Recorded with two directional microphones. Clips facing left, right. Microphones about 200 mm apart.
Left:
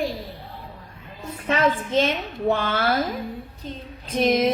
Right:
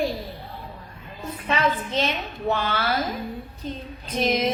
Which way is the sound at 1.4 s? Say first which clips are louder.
Left 3 dB; 45° left (ahead or behind).